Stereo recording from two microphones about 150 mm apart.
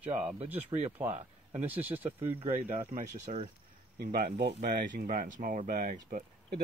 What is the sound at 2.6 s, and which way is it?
Speech, 60° right (ahead or behind).